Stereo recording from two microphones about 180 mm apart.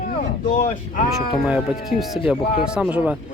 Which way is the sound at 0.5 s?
50° left (ahead or behind).